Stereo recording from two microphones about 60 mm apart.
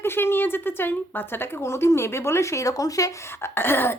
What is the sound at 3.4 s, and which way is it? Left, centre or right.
Speech, left.